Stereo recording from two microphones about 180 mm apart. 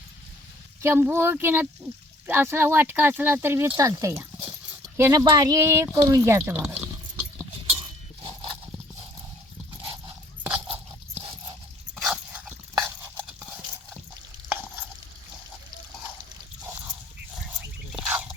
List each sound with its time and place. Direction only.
0.8 s speech: 15° right (ahead or behind)
7.7 s horse: 30° right (ahead or behind)
10.4 s crunch: 10° right (ahead or behind)
11.1 s a sound: 30° right (ahead or behind)
12.0 s dog: 5° right (ahead or behind)
17.9 s bird: 5° right (ahead or behind)